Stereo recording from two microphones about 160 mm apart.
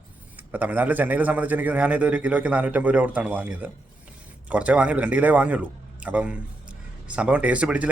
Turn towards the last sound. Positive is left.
turn(degrees=-10)  # may be behind; listen again after turning